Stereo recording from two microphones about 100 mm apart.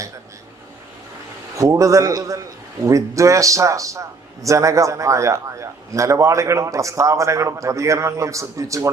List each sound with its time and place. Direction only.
1.5 s a man's voice: 35° right (ahead or behind)